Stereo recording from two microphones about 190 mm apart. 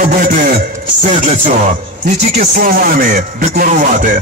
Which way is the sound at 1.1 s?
35° right (ahead or behind).